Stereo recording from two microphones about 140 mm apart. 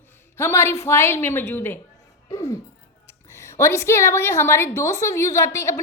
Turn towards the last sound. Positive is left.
turn(degrees=20)  # may be behind; listen again after turning